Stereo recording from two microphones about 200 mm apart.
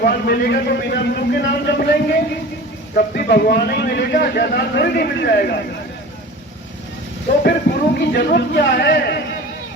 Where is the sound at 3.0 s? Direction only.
50° left (ahead or behind).